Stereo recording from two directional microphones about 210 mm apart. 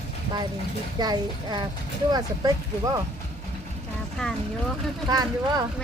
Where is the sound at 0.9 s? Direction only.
20° right (ahead or behind).